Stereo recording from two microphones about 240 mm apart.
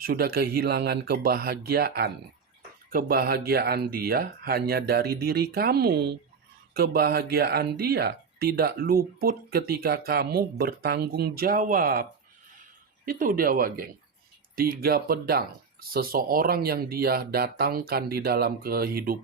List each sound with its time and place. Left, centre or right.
0.0 s speech: right
13.1 s speech: right